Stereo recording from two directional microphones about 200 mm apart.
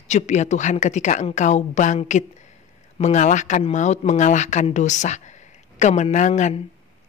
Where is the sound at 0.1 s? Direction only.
35° left (ahead or behind).